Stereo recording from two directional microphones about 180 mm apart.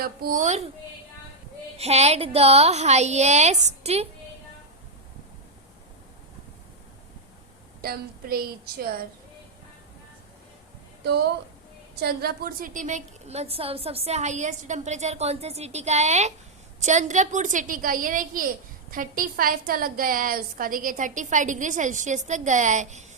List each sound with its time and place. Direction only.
0.0 s a woman's voice: 55° right (ahead or behind)
1.8 s a woman's voice: 35° right (ahead or behind)
7.8 s a woman's voice: 55° right (ahead or behind)
11.0 s a woman's voice: 65° right (ahead or behind); by 23.0 s 40° right (ahead or behind)